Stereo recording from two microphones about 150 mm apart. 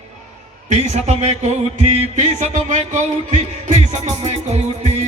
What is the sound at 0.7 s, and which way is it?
Music, 50° right (ahead or behind).